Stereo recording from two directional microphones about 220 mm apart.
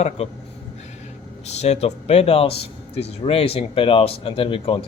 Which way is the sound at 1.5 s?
30° left (ahead or behind).